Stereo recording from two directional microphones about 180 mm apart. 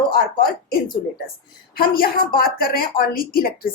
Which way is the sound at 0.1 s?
55° left (ahead or behind).